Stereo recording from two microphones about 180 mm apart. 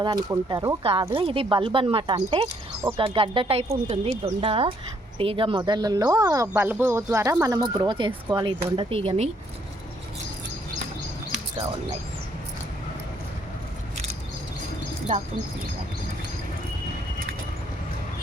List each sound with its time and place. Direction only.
0.0 s speech: 20° right (ahead or behind)
0.8 s speech: 30° right (ahead or behind)